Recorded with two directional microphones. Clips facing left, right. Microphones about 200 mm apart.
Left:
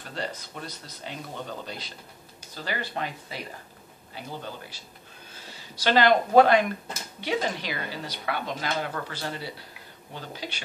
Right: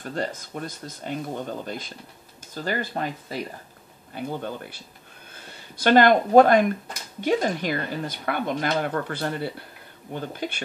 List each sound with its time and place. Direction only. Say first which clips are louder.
0.0 s speech: right 5 dB; 45° right (ahead or behind)
4.1 s speech: right 7 dB; 55° right (ahead or behind)